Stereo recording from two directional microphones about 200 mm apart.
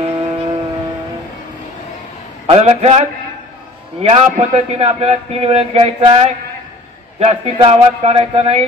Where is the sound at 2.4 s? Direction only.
30° right (ahead or behind).